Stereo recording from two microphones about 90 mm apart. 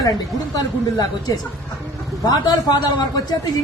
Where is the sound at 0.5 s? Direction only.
45° left (ahead or behind).